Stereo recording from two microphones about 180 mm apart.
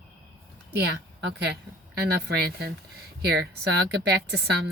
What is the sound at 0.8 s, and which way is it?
A woman's voice, 65° right (ahead or behind).